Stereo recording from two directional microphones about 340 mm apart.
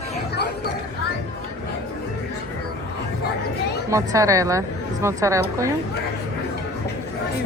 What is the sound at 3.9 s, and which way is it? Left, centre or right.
A woman's voice, centre.